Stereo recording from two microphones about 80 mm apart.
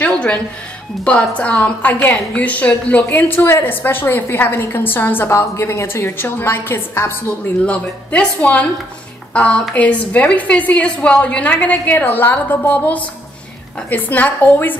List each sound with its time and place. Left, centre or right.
0.0 s music: centre
1.0 s a woman's voice: centre
7.2 s a woman's voice: centre